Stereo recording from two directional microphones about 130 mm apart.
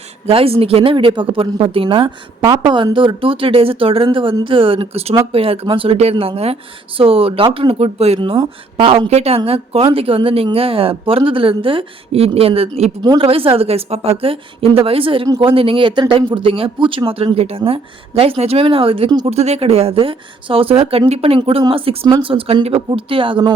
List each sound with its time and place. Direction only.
0.3 s a woman's voice: 50° right (ahead or behind)
13.0 s a woman's voice: 35° right (ahead or behind)
13.2 s a woman's voice: 45° right (ahead or behind)